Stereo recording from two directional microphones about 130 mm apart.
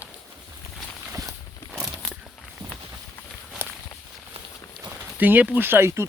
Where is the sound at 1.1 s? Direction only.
25° right (ahead or behind).